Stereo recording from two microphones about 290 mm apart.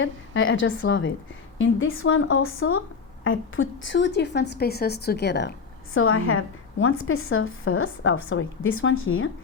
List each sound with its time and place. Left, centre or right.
0.0 s a woman's voice: left